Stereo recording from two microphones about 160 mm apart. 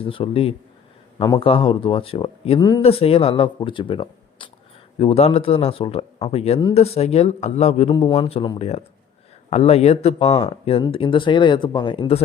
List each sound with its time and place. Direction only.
0.0 s speech: 35° left (ahead or behind)
2.6 s speech: 25° left (ahead or behind)
2.8 s speech: 35° left (ahead or behind)